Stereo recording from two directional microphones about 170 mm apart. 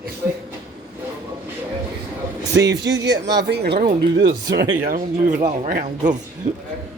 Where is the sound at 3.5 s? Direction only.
75° right (ahead or behind).